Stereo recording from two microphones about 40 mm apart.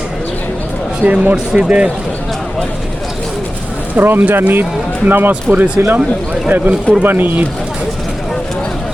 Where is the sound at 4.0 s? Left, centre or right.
Right.